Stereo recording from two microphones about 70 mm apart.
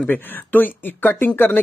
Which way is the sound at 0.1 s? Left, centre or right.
Left.